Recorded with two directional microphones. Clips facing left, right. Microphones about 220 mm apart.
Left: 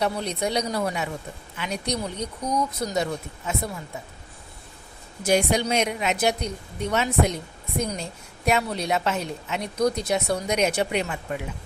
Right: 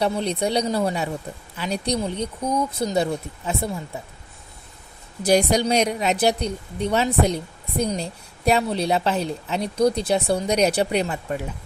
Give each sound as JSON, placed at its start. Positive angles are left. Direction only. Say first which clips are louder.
{"t": 0.0, "sound": "a woman's voice", "louder": "right 3 dB", "side_deg": -30}
{"t": 5.2, "sound": "a woman's voice", "louder": "right 3 dB", "side_deg": -40}